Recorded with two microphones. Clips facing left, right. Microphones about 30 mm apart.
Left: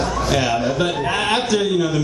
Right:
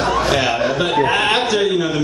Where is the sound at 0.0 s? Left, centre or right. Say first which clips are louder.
Right 4 dB; right.